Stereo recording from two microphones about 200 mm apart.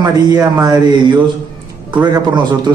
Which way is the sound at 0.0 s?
20° right (ahead or behind).